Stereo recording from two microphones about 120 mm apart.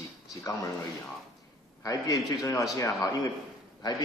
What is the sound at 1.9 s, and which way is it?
A man's voice, 30° left (ahead or behind).